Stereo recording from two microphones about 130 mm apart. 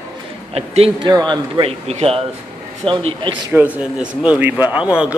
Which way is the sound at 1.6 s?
50° right (ahead or behind).